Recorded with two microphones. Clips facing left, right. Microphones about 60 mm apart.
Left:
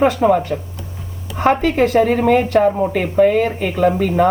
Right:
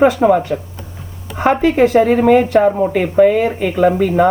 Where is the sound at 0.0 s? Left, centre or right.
Centre.